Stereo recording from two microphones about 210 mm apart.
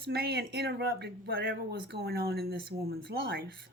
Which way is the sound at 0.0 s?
50° right (ahead or behind).